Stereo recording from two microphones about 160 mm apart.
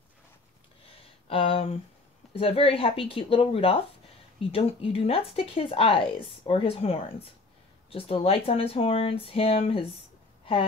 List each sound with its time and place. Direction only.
1.2 s speech: 35° left (ahead or behind)